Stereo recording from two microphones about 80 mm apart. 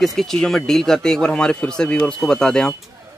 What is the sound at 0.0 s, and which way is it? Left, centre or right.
Speech, centre.